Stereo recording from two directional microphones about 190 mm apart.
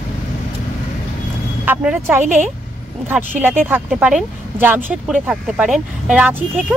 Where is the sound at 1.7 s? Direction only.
10° right (ahead or behind).